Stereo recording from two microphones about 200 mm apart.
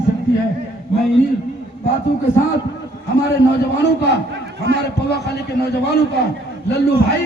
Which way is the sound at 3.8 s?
60° left (ahead or behind).